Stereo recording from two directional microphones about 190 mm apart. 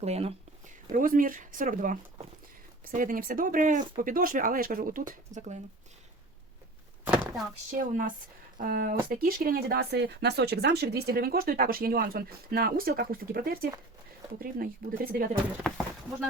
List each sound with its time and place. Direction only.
0.0 s speech: 35° right (ahead or behind)
0.9 s speech: 45° right (ahead or behind)
7.7 s speech: 45° right (ahead or behind)
15.6 s speech: 5° left (ahead or behind)